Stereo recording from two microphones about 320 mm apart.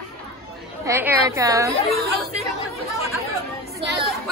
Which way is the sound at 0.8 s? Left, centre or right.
Centre.